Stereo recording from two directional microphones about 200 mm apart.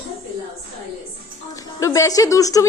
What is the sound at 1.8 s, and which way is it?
Speech, 15° left (ahead or behind).